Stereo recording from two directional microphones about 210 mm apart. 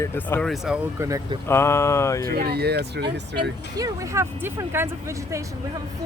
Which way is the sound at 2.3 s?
45° right (ahead or behind).